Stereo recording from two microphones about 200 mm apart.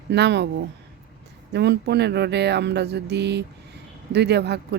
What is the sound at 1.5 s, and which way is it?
Speech, 55° right (ahead or behind).